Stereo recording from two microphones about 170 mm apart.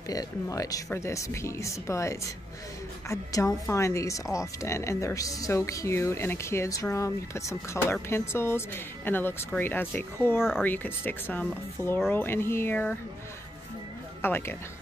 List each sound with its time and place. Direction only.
0.1 s speech: 20° left (ahead or behind)
14.2 s speech: 15° left (ahead or behind)